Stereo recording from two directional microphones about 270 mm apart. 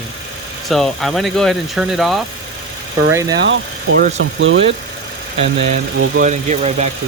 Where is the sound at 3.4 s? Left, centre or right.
Right.